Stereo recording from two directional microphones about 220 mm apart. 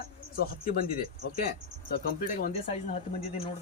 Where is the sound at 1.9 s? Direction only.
40° left (ahead or behind).